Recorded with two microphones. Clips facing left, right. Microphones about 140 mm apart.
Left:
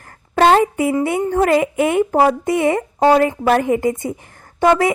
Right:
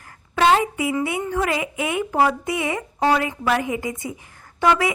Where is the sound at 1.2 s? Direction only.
45° left (ahead or behind).